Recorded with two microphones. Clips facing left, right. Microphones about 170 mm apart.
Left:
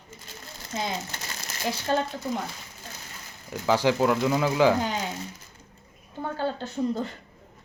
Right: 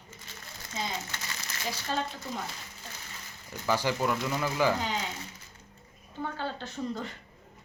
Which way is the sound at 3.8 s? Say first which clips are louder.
Left 9 dB; 90° left.